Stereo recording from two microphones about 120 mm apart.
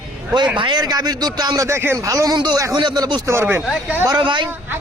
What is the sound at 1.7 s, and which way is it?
Speech, 20° right (ahead or behind).